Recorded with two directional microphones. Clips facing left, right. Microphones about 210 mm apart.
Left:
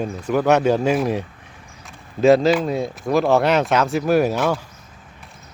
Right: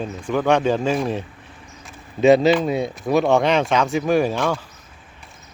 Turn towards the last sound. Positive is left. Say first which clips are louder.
# left 1 dB
turn(degrees=5)  # may be behind; listen again after turning